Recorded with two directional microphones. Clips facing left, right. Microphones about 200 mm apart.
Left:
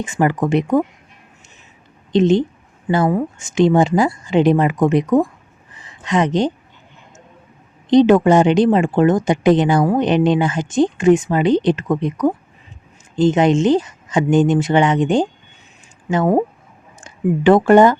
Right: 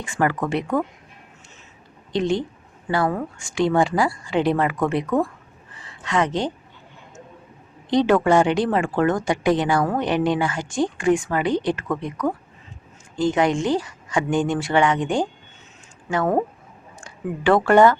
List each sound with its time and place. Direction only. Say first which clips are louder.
0.0 s speech: left 5 dB; 20° left (ahead or behind)
2.1 s speech: left 8 dB; 20° left (ahead or behind)
5.7 s a sound: left 4 dB; 20° left (ahead or behind)
7.9 s speech: left 6 dB; 20° left (ahead or behind)